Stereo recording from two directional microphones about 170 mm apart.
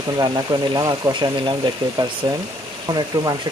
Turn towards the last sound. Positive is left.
turn(degrees=-20)  # may be behind; listen again after turning